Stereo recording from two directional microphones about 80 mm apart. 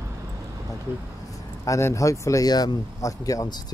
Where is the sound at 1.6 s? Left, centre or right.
Left.